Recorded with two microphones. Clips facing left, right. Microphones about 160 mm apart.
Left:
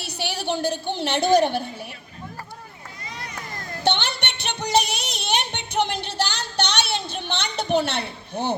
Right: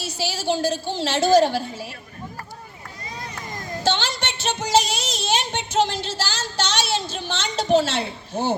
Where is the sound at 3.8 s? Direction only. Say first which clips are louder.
Even; 60° left (ahead or behind).